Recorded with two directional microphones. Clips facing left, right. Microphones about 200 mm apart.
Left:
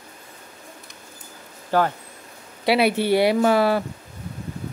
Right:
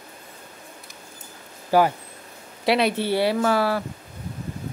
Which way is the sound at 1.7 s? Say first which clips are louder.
Right 2 dB; 10° right (ahead or behind).